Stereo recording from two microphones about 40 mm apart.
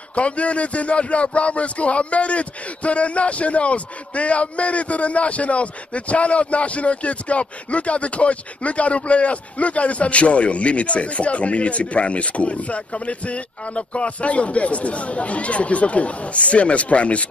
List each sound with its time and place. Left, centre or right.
0.1 s speech: left